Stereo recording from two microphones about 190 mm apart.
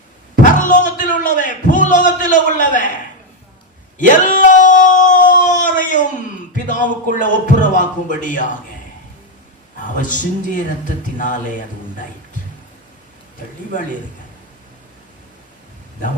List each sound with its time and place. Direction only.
0.4 s speech: 40° left (ahead or behind)
3.9 s a sound: 40° left (ahead or behind)
6.7 s speech: 45° left (ahead or behind)
10.0 s speech: 45° left (ahead or behind)